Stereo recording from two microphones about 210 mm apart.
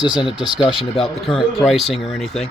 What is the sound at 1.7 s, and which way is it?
Speech, centre (ahead or behind).